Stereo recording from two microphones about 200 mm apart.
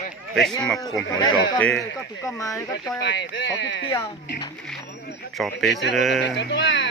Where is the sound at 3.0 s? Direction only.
60° left (ahead or behind).